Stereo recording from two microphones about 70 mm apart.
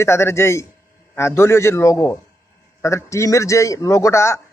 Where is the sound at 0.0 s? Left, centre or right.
Left.